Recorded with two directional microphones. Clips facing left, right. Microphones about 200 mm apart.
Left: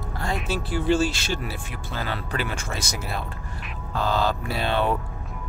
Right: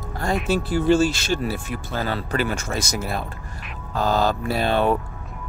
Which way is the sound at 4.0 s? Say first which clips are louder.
Right 3 dB; 45° right (ahead or behind).